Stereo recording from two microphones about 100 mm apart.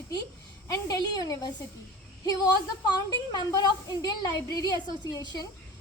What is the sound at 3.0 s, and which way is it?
A woman's voice, 40° left (ahead or behind).